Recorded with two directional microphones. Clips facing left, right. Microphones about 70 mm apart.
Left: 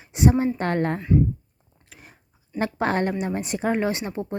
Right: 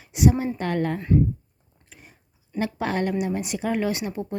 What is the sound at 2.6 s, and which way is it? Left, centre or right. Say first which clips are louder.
Speech: left 2 dB; left.